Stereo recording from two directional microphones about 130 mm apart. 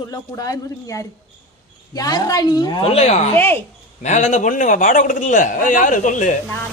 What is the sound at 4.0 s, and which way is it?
A man's voice, 60° left (ahead or behind).